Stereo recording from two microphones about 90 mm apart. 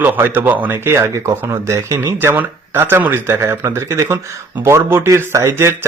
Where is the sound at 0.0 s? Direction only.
25° right (ahead or behind).